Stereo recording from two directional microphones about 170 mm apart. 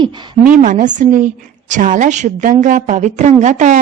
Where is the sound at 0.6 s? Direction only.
50° right (ahead or behind).